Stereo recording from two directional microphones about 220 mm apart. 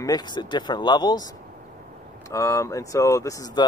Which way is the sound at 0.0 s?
20° left (ahead or behind).